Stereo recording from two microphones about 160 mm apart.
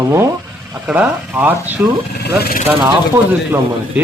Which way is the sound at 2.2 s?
75° left (ahead or behind).